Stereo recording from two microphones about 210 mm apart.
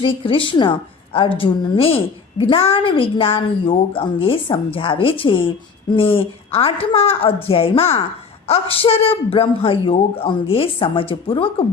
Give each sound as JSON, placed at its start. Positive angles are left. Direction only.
{"t": 0.0, "sound": "a woman's voice", "side_deg": 25}